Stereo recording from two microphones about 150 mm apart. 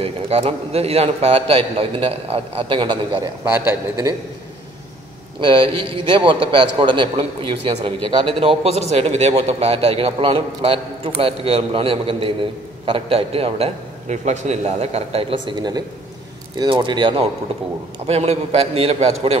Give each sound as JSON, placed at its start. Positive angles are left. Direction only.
{"t": 0.0, "sound": "a man's voice", "side_deg": -40}
{"t": 3.4, "sound": "a man's voice", "side_deg": -10}
{"t": 5.4, "sound": "a man's voice", "side_deg": -35}
{"t": 18.0, "sound": "a man's voice", "side_deg": -45}